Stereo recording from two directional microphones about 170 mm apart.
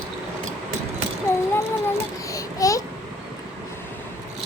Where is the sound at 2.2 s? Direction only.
20° left (ahead or behind).